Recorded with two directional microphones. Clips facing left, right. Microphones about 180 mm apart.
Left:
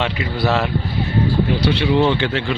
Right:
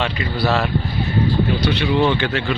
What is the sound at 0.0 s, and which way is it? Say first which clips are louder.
A man's voice: left 1 dB; 20° left (ahead or behind).